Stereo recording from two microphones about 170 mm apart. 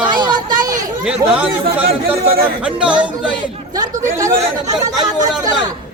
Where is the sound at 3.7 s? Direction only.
20° right (ahead or behind).